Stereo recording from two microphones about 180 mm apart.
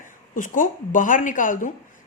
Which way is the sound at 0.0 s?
45° left (ahead or behind).